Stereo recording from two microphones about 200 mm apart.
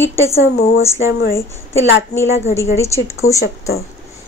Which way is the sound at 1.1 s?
55° left (ahead or behind).